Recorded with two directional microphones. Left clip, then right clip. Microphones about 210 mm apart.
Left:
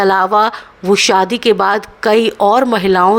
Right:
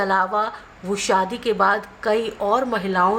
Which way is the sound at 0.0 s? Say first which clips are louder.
Left 9 dB; 45° left (ahead or behind).